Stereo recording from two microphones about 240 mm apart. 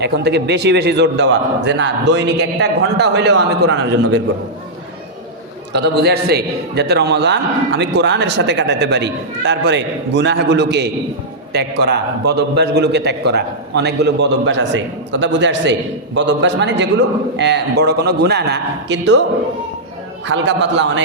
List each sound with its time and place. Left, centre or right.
0.0 s a man's voice: right
5.7 s a man's voice: right
20.2 s a man's voice: right